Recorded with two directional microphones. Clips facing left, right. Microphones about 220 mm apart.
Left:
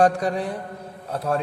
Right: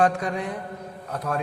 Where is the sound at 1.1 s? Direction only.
30° left (ahead or behind).